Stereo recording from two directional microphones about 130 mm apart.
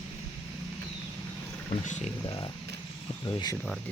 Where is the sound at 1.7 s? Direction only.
65° left (ahead or behind).